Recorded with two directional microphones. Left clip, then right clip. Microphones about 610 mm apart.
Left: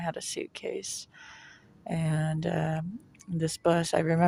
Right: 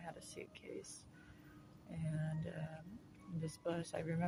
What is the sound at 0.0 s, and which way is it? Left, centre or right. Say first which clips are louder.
Speech: left 17 dB; right.